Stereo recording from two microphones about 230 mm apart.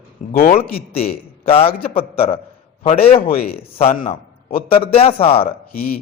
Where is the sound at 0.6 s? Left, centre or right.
Left.